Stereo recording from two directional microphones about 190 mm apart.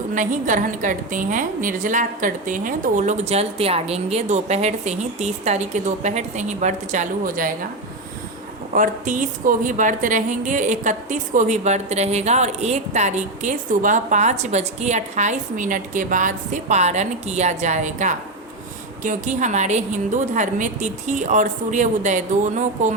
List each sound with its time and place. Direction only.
0.1 s a woman's voice: 40° right (ahead or behind)
8.7 s a woman's voice: 45° right (ahead or behind)